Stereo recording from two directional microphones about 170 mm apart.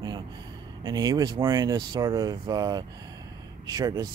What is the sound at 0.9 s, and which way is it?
Speech, 20° right (ahead or behind).